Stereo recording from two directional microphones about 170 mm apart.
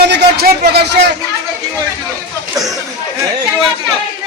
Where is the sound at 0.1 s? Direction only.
70° right (ahead or behind).